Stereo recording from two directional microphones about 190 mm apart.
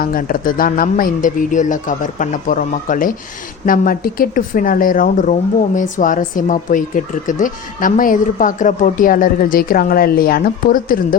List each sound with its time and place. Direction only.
0.0 s speech: 50° left (ahead or behind)